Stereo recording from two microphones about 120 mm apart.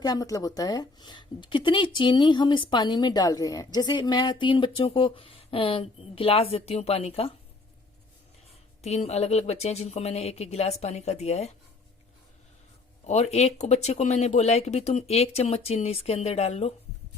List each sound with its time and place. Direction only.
0.0 s a woman's voice: 30° left (ahead or behind); by 7.3 s 55° left (ahead or behind)
8.8 s speech: 60° left (ahead or behind)
13.1 s speech: 65° left (ahead or behind)